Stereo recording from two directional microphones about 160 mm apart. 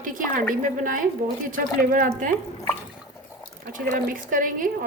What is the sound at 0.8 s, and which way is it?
A woman's voice, 60° right (ahead or behind).